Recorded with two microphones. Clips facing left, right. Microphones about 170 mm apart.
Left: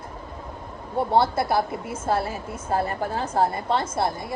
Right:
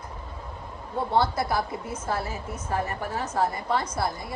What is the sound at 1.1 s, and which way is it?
A woman's voice, 25° left (ahead or behind).